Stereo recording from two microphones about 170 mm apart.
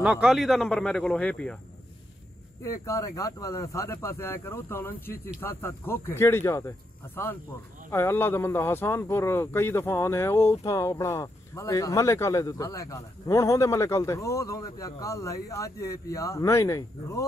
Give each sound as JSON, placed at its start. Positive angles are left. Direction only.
{"t": 0.0, "sound": "speech", "side_deg": -5}
{"t": 2.6, "sound": "speech", "side_deg": 20}
{"t": 7.9, "sound": "speech", "side_deg": 15}